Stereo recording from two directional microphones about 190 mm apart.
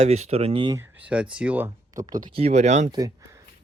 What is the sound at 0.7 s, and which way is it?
Speech, 10° right (ahead or behind).